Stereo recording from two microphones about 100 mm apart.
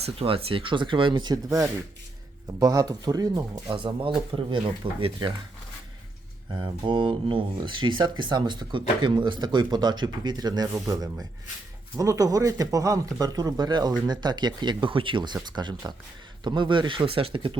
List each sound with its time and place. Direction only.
0.0 s speech: 75° right (ahead or behind); by 3.4 s 40° right (ahead or behind)
3.7 s speech: 60° right (ahead or behind)
6.5 s speech: 50° right (ahead or behind)